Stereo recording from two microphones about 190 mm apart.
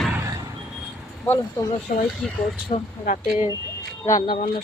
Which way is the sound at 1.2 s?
15° left (ahead or behind).